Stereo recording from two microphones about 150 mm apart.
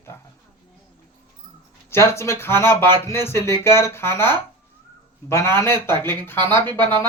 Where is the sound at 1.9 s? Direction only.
15° left (ahead or behind).